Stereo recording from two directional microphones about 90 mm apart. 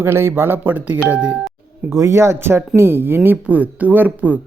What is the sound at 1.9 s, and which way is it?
Speech, 30° right (ahead or behind).